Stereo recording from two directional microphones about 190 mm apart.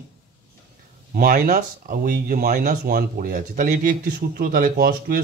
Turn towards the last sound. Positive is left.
turn(degrees=-50)  # may be behind; listen again after turning